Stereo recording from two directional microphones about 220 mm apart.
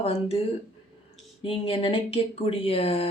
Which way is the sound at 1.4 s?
25° left (ahead or behind).